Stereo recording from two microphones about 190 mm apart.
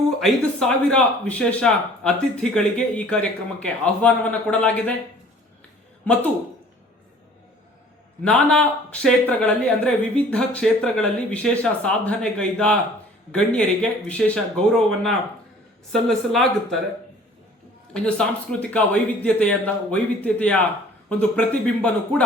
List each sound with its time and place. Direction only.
0.2 s a man's voice: 5° left (ahead or behind)
8.2 s speech: 5° left (ahead or behind)
17.9 s a man's voice: 5° left (ahead or behind)